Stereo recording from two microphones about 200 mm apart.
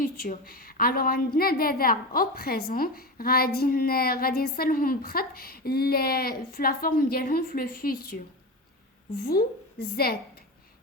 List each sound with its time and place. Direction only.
0.0 s a woman's voice: 45° left (ahead or behind)
9.9 s a woman's voice: 50° left (ahead or behind)